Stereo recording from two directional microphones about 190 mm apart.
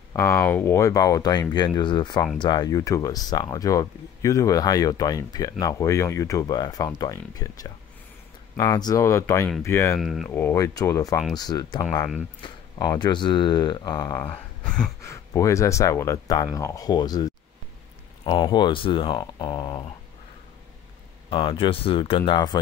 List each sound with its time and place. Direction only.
0.1 s speech: 15° left (ahead or behind)
9.9 s speech: centre (ahead or behind)
10.3 s speech: 15° left (ahead or behind)
21.3 s speech: 25° left (ahead or behind)